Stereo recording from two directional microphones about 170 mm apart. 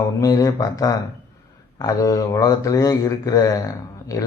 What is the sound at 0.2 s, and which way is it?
Speech, 20° left (ahead or behind).